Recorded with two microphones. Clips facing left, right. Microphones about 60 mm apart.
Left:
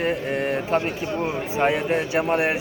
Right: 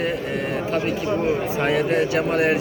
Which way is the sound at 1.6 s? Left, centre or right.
Left.